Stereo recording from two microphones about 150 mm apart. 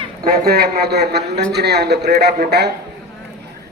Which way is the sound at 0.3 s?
90° right.